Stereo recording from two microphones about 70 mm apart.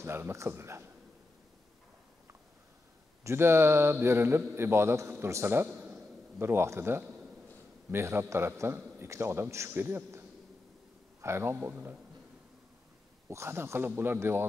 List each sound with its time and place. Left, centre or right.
0.0 s a man's voice: right
3.3 s a man's voice: right
13.3 s a man's voice: right